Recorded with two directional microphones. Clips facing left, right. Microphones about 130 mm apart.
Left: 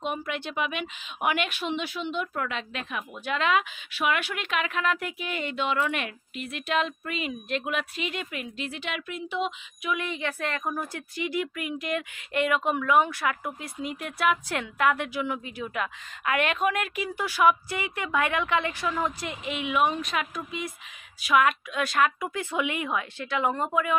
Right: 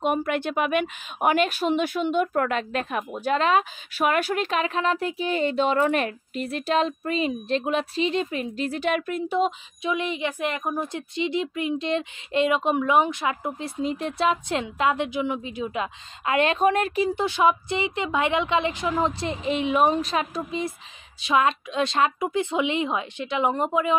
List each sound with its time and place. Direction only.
0.0 s speech: 55° right (ahead or behind)
1.3 s speech: 40° right (ahead or behind)
9.8 s a woman's voice: 20° right (ahead or behind)